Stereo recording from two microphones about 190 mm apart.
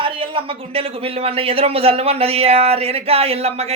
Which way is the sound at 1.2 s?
30° right (ahead or behind).